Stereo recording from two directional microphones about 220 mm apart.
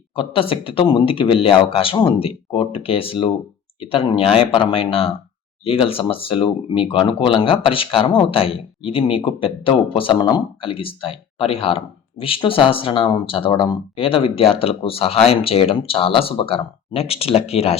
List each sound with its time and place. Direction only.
0.2 s speech: 25° left (ahead or behind)